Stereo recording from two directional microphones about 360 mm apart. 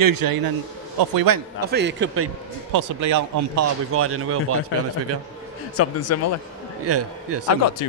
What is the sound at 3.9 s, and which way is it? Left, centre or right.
Speech, right.